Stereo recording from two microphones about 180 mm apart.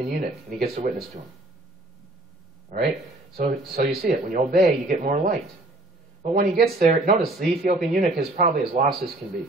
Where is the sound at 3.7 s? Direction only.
60° right (ahead or behind).